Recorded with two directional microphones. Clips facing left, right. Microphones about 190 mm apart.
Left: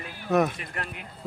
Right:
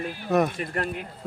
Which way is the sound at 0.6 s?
40° right (ahead or behind).